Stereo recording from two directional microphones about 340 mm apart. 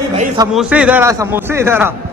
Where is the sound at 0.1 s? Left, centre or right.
Centre.